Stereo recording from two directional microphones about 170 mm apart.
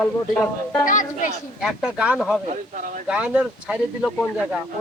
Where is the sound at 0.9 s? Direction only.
50° left (ahead or behind).